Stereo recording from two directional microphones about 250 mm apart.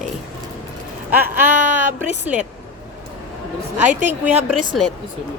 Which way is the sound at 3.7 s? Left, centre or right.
Centre.